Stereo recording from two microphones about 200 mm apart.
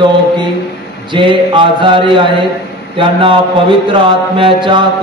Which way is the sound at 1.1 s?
25° right (ahead or behind).